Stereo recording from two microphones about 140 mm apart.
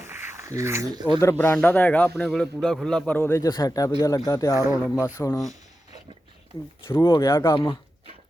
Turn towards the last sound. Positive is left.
turn(degrees=20)  # may be behind; listen again after turning